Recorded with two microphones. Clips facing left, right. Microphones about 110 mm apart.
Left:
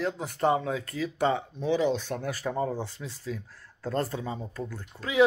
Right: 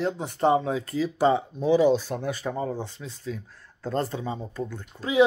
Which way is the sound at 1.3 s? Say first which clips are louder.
Right 6 dB; 10° right (ahead or behind).